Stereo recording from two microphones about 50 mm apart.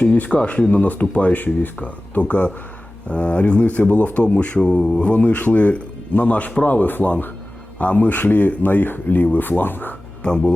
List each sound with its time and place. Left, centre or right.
0.0 s speech: left
10.2 s speech: centre